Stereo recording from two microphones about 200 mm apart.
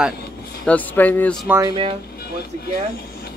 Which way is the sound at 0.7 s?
10° left (ahead or behind).